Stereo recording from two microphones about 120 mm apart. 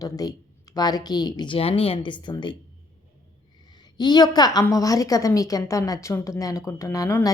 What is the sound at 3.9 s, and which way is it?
A woman's voice, 35° left (ahead or behind).